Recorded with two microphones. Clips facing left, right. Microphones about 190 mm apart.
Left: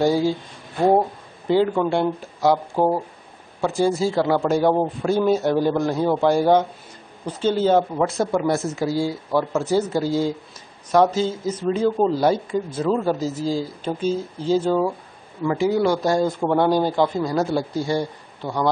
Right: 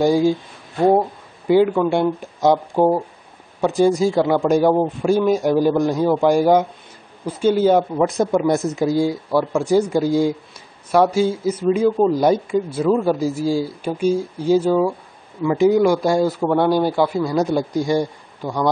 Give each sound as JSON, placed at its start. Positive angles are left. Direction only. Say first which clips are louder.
{"t": 0.0, "sound": "a man's voice", "louder": "right 3 dB", "side_deg": -15}
{"t": 1.5, "sound": "a man's voice", "louder": "right 4 dB", "side_deg": -15}